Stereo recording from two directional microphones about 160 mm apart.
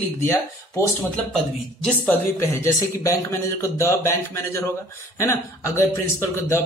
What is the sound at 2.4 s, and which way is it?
Speech, 20° left (ahead or behind).